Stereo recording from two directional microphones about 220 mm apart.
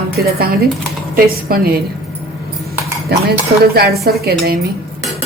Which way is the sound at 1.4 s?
45° right (ahead or behind).